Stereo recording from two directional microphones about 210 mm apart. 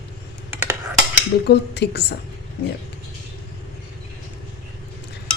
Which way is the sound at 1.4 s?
50° left (ahead or behind).